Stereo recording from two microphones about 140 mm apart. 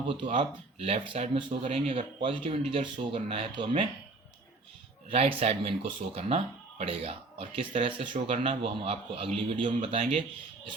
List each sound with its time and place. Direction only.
0.0 s a man's voice: 35° right (ahead or behind)
5.0 s a man's voice: 45° right (ahead or behind)